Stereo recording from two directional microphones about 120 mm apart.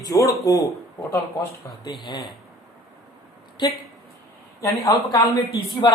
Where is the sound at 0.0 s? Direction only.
30° left (ahead or behind).